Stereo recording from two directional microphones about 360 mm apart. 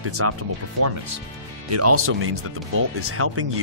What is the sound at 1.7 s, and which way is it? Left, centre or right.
Speech, right.